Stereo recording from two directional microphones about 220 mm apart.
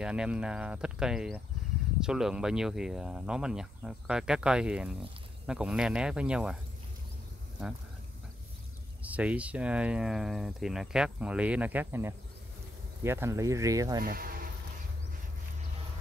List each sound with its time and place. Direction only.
0.0 s speech: 5° right (ahead or behind)
9.0 s speech: 5° right (ahead or behind)
14.0 s speech: 40° right (ahead or behind)